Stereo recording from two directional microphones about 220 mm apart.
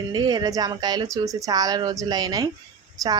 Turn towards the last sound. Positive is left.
turn(degrees=-15)  # may be behind; listen again after turning